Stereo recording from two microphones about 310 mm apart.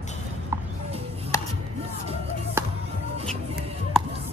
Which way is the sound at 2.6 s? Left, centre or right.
Centre.